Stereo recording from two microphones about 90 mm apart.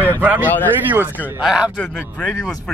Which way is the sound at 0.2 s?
20° right (ahead or behind).